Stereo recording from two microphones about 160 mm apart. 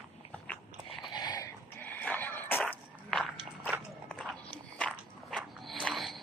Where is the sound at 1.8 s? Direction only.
10° left (ahead or behind).